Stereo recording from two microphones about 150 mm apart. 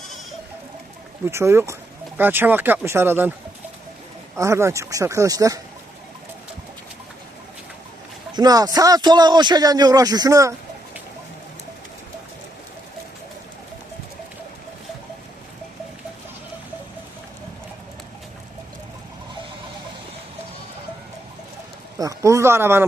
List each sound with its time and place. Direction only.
1.2 s speech: 15° right (ahead or behind)
4.4 s a man's voice: 20° right (ahead or behind)
8.3 s a man's voice: 25° right (ahead or behind)
21.9 s a sound: 20° right (ahead or behind)